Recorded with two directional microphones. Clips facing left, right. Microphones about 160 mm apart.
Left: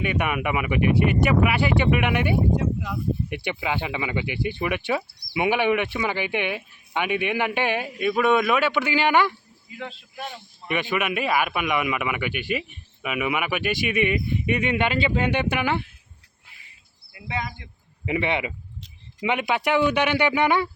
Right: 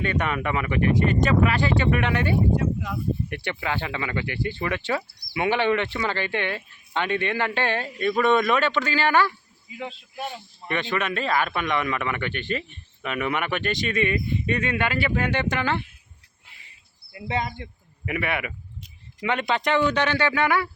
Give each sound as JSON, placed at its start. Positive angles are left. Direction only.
{"t": 0.0, "sound": "speech", "side_deg": 15}
{"t": 9.7, "sound": "speech", "side_deg": -5}
{"t": 10.7, "sound": "speech", "side_deg": 10}
{"t": 17.1, "sound": "speech", "side_deg": -30}
{"t": 18.0, "sound": "speech", "side_deg": 20}